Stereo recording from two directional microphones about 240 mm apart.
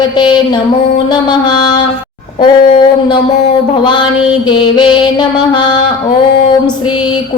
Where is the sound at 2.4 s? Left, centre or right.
Centre.